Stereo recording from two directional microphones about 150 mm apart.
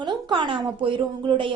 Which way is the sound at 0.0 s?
30° right (ahead or behind).